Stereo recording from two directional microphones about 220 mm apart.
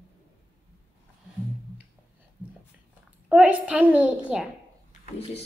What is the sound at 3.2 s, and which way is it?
A child's voice, 5° right (ahead or behind).